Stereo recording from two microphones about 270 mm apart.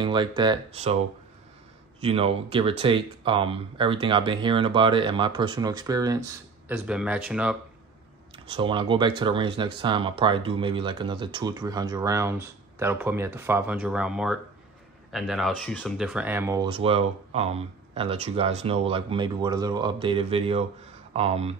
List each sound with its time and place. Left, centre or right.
0.0 s speech: centre
2.0 s speech: right; by 7.5 s centre
8.5 s speech: centre